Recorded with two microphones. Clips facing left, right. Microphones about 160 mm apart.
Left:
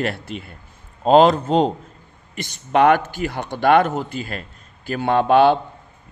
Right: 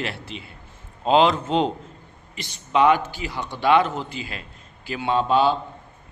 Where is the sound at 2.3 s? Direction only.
55° left (ahead or behind).